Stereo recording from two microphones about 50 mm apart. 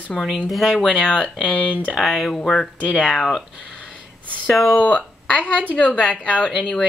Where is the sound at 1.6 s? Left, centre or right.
Right.